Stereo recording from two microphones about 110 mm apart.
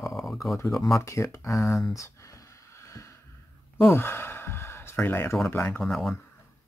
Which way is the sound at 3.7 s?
20° left (ahead or behind).